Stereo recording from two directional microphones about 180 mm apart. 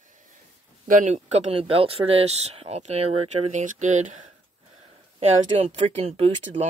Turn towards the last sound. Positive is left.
turn(degrees=-35)  # may be behind; listen again after turning